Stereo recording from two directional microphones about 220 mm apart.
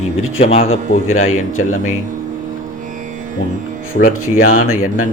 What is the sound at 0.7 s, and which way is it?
A man's voice, 70° left (ahead or behind).